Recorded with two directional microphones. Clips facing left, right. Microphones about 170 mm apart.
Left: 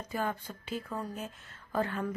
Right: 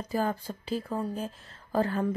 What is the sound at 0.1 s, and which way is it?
Speech, 30° right (ahead or behind).